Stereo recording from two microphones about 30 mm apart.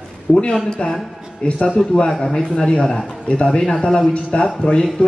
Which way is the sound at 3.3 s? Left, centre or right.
Left.